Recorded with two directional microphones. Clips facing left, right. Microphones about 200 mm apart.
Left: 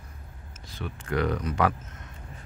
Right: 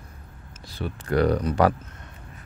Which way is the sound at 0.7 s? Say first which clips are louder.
Right 5 dB; 35° right (ahead or behind).